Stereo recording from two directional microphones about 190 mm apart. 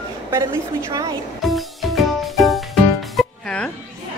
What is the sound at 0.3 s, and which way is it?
Speech, 15° right (ahead or behind).